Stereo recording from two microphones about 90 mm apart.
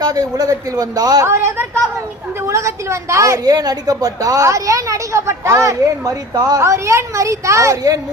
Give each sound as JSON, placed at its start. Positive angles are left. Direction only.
{"t": 0.0, "sound": "a man's voice", "side_deg": -45}
{"t": 1.3, "sound": "a woman's voice", "side_deg": -25}
{"t": 6.3, "sound": "a man's voice", "side_deg": -50}
{"t": 6.6, "sound": "a woman's voice", "side_deg": -30}